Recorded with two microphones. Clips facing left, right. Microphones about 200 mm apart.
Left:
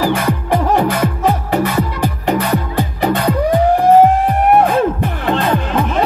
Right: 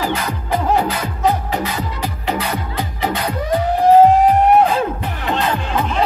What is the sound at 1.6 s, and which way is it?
Music, 55° left (ahead or behind).